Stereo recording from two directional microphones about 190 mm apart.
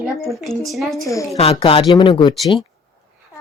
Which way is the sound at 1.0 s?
15° left (ahead or behind).